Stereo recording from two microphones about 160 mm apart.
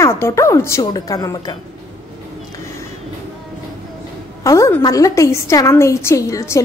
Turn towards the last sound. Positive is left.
turn(degrees=20)  # may be behind; listen again after turning